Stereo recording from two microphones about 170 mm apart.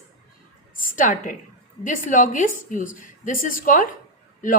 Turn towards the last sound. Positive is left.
turn(degrees=50)  # may be behind; listen again after turning